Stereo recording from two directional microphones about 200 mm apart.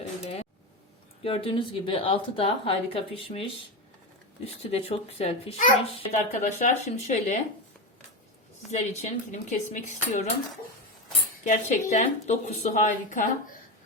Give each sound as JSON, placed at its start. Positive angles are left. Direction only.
{"t": 1.2, "sound": "a woman's voice", "side_deg": 30}
{"t": 8.8, "sound": "a woman's voice", "side_deg": 35}
{"t": 11.4, "sound": "a woman's voice", "side_deg": 40}